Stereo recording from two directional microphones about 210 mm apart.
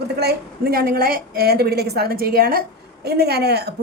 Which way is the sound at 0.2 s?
50° right (ahead or behind).